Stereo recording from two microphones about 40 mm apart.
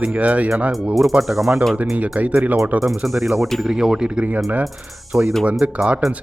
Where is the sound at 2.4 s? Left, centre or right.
Right.